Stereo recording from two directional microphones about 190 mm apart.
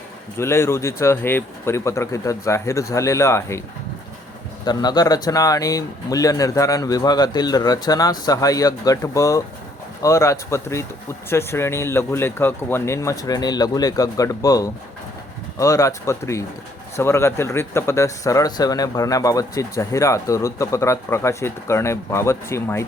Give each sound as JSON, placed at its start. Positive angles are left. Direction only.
{"t": 0.3, "sound": "speech", "side_deg": 15}
{"t": 4.6, "sound": "speech", "side_deg": 20}